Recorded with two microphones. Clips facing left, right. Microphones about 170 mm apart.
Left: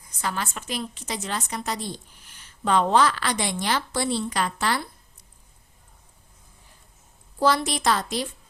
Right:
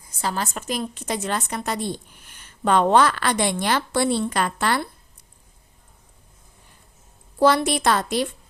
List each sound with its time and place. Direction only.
0.2 s a woman's voice: 35° right (ahead or behind); by 4.8 s 55° right (ahead or behind)
7.3 s a woman's voice: 60° right (ahead or behind)